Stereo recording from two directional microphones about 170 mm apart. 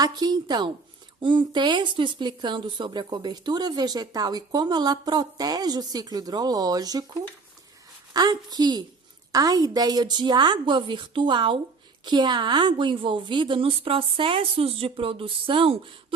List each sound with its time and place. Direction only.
0.0 s speech: 25° right (ahead or behind)